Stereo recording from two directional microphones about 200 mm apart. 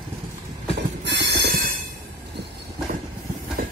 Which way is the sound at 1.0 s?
60° right (ahead or behind).